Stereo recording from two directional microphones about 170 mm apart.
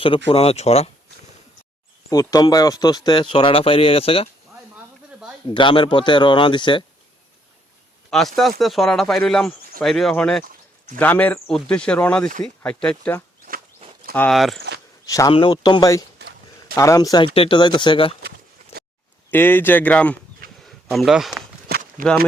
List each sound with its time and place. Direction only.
0.3 s speech: 35° left (ahead or behind)
2.0 s speech: 20° left (ahead or behind)
5.5 s speech: 30° left (ahead or behind)
8.4 s speech: centre (ahead or behind)
14.3 s speech: centre (ahead or behind)
15.0 s speech: 20° left (ahead or behind)
15.3 s speech: 30° left (ahead or behind)
16.1 s a sound: 70° right (ahead or behind)
16.7 s speech: 20° left (ahead or behind)
19.3 s speech: 10° left (ahead or behind)
20.6 s a sound: centre (ahead or behind)
21.7 s walk: 55° right (ahead or behind)